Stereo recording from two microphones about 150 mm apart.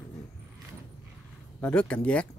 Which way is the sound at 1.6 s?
10° left (ahead or behind).